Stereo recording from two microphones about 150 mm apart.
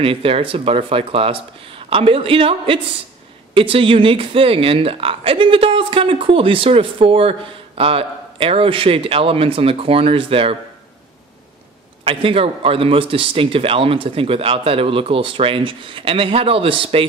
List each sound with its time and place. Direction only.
0.0 s speech: 40° right (ahead or behind)
12.0 s speech: 40° right (ahead or behind)